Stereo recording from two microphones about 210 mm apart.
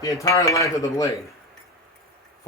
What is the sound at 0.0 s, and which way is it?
Speech, 15° left (ahead or behind).